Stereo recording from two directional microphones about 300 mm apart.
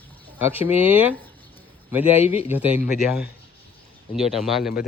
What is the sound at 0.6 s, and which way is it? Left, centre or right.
Speech, centre.